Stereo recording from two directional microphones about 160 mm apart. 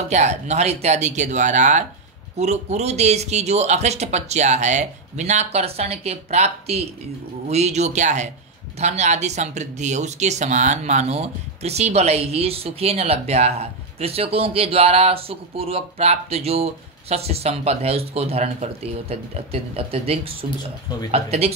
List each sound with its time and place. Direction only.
0.1 s speech: 45° right (ahead or behind)